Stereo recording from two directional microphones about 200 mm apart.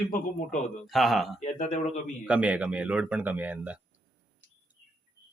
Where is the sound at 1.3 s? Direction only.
35° left (ahead or behind).